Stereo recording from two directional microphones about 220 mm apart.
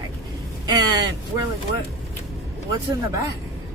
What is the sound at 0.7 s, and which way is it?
Speech, 20° right (ahead or behind).